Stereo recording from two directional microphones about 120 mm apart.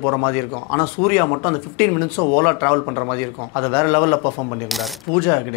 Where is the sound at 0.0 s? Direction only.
25° left (ahead or behind).